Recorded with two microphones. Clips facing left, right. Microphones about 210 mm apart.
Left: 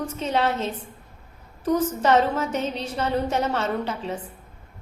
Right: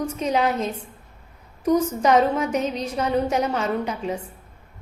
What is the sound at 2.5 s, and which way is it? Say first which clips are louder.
Speech: right 3 dB; 30° left (ahead or behind).